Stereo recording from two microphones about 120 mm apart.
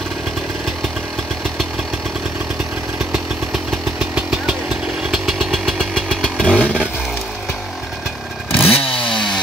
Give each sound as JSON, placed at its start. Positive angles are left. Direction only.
{"t": 3.1, "sound": "vehicle", "side_deg": -5}
{"t": 5.1, "sound": "motorcycle", "side_deg": 0}
{"t": 8.6, "sound": "chainsaw", "side_deg": 50}